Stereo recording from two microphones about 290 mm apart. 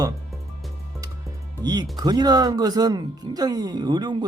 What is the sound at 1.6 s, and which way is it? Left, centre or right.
Speech, centre.